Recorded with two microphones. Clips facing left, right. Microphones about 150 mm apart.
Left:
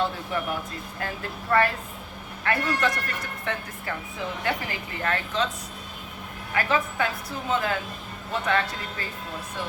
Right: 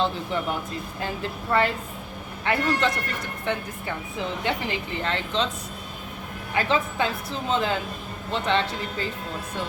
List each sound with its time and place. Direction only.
0.9 s a woman's voice: 25° right (ahead or behind)
6.5 s a woman's voice: 25° right (ahead or behind)